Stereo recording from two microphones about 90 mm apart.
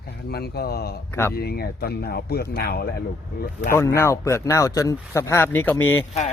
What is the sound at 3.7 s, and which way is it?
Speech, 30° left (ahead or behind).